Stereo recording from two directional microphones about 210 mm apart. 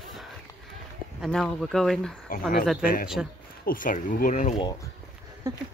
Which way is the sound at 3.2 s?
5° right (ahead or behind).